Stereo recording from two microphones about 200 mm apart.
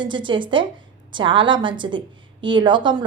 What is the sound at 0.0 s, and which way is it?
A woman's voice, 25° right (ahead or behind).